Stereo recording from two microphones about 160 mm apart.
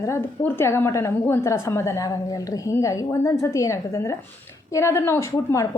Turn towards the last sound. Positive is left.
turn(degrees=15)  # may be behind; listen again after turning